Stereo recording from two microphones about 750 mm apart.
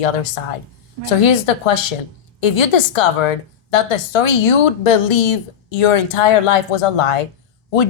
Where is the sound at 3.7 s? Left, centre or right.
Left.